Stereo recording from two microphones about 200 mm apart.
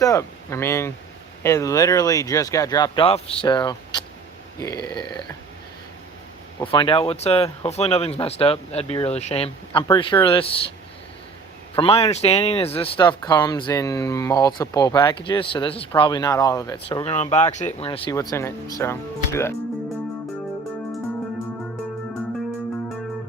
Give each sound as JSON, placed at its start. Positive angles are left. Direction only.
{"t": 0.0, "sound": "speech", "side_deg": 15}
{"t": 6.7, "sound": "speech", "side_deg": 25}
{"t": 11.8, "sound": "speech", "side_deg": 30}
{"t": 17.0, "sound": "speech", "side_deg": 30}
{"t": 18.1, "sound": "speech", "side_deg": 15}